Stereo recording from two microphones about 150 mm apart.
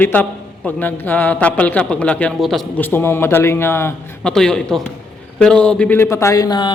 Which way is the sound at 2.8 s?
15° left (ahead or behind).